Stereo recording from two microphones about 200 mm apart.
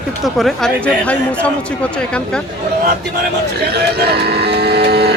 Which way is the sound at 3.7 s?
55° right (ahead or behind).